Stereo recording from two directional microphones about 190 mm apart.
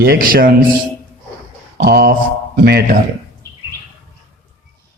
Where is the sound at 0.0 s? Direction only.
50° right (ahead or behind).